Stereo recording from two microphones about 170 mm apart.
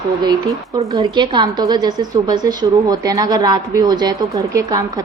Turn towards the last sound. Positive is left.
turn(degrees=-20)  # may be behind; listen again after turning